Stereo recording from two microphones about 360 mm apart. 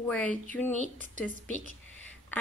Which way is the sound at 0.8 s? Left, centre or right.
Right.